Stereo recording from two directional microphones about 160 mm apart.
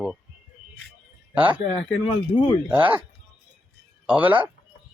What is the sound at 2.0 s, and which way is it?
Speech, 30° left (ahead or behind).